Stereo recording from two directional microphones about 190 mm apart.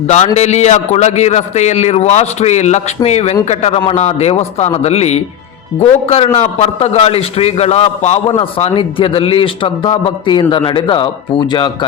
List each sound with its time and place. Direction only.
0.3 s a man's voice: 35° left (ahead or behind)